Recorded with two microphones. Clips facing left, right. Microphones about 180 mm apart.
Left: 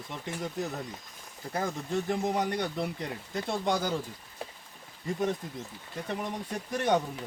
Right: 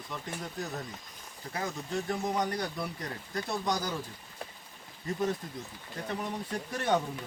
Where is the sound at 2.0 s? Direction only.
25° left (ahead or behind).